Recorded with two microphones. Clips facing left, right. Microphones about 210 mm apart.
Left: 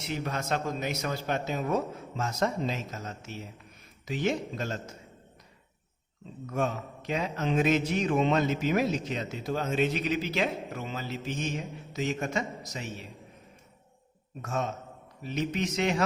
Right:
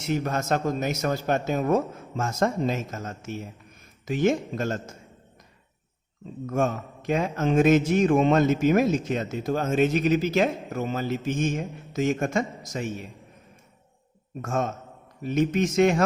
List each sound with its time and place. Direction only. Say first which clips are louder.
0.0 s a man's voice: right 6 dB; 45° right (ahead or behind)
6.4 s a man's voice: right 5 dB; 50° right (ahead or behind)
14.4 s a man's voice: right 4 dB; 50° right (ahead or behind)